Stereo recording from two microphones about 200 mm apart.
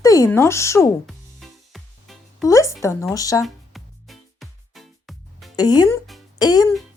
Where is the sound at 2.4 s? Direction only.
15° left (ahead or behind).